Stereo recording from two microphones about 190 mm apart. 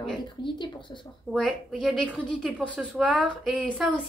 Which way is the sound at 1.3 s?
Centre (ahead or behind).